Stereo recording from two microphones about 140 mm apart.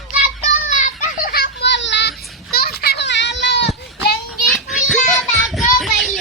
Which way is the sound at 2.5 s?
90° left.